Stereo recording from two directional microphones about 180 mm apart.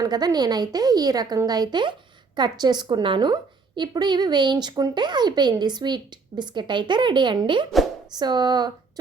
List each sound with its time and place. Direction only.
0.0 s speech: 20° right (ahead or behind)